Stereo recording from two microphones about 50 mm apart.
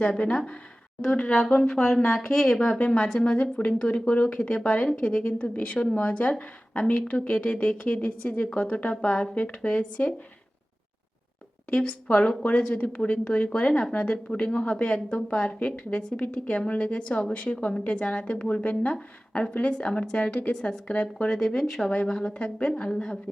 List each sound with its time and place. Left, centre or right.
0.0 s speech: left
2.1 s speech: centre
2.5 s speech: left
2.9 s speech: centre
5.2 s speech: left; by 9.3 s centre
9.3 s speech: left
11.7 s speech: left
21.2 s speech: centre
22.0 s speech: centre